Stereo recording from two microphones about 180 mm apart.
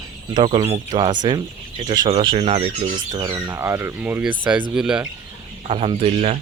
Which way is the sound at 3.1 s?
25° right (ahead or behind).